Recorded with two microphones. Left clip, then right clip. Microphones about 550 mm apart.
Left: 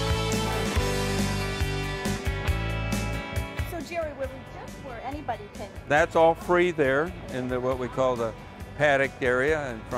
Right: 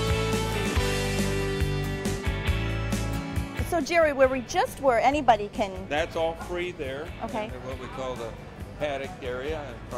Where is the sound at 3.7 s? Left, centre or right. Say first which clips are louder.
Right 13 dB; right.